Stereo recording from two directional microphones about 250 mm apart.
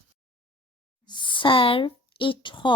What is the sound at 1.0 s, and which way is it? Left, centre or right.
Speech, centre.